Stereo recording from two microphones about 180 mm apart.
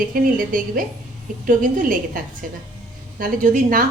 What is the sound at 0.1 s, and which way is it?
A woman's voice, 50° right (ahead or behind).